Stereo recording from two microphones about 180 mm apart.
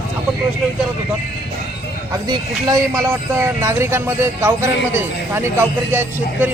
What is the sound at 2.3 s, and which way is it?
A man's voice, 20° right (ahead or behind).